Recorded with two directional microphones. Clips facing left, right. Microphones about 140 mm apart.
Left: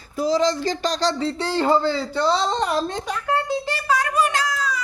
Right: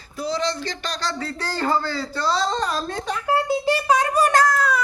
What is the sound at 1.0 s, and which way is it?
Speech, 25° left (ahead or behind).